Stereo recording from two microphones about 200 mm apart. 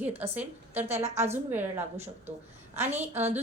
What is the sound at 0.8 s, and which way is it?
Speech, 35° right (ahead or behind).